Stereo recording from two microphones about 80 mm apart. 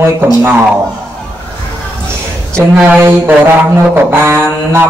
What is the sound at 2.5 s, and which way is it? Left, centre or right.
Mantra, right.